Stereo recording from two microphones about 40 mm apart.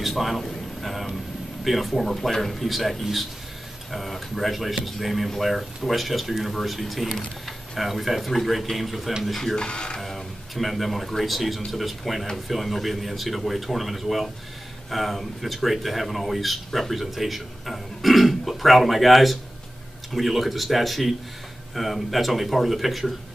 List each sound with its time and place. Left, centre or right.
0.0 s a man's voice: centre
9.6 s speech: left
9.9 s speech: centre